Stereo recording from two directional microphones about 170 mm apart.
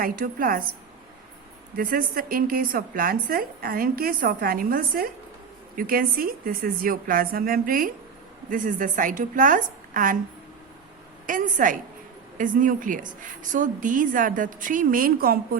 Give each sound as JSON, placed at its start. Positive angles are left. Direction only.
{"t": 0.0, "sound": "a woman's voice", "side_deg": -55}
{"t": 1.7, "sound": "a woman's voice", "side_deg": -55}
{"t": 11.3, "sound": "a woman's voice", "side_deg": -50}